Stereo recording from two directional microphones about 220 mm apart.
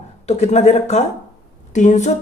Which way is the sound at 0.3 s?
30° left (ahead or behind).